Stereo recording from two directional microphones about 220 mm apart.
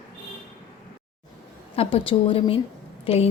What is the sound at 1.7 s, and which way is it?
A woman's voice, 25° left (ahead or behind).